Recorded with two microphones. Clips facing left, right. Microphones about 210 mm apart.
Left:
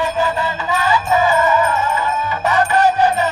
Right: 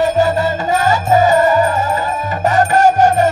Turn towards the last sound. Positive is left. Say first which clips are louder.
# right 4 dB
turn(degrees=-45)  # may be behind; listen again after turning